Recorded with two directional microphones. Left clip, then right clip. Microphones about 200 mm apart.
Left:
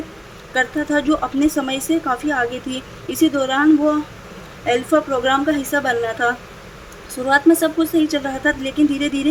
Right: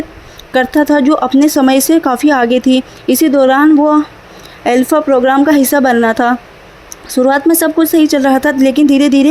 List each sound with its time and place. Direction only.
0.5 s speech: 45° right (ahead or behind)